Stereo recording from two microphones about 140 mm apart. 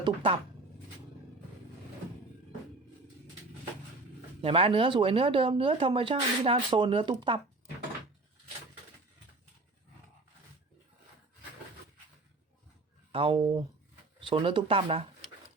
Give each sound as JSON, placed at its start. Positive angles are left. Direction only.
{"t": 0.0, "sound": "speech", "side_deg": -35}
{"t": 4.4, "sound": "speech", "side_deg": -40}
{"t": 13.1, "sound": "speech", "side_deg": -40}